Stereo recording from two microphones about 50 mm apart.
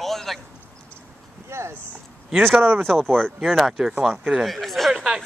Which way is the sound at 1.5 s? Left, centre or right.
Right.